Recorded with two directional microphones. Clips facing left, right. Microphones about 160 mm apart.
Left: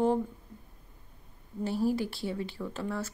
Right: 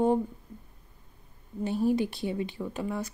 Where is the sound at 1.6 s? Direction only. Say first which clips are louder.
Right 3 dB; 20° right (ahead or behind).